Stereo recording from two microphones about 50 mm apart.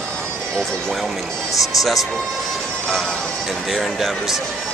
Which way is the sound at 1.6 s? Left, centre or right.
Centre.